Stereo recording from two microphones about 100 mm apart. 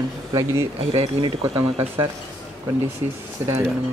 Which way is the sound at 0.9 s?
65° right (ahead or behind).